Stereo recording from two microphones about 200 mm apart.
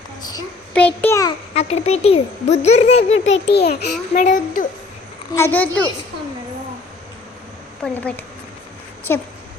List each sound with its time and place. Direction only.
0.7 s a child's voice: 5° left (ahead or behind)
1.5 s speech: 30° left (ahead or behind)
3.1 s a child's voice: 70° left (ahead or behind)
4.1 s speech: 40° left (ahead or behind)
5.3 s a child's voice: 10° left (ahead or behind)
7.8 s speech: 5° left (ahead or behind)
9.1 s a child's voice: 10° left (ahead or behind)